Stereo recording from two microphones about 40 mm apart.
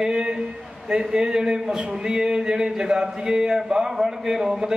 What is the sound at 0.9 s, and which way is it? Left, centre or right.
Speech, centre.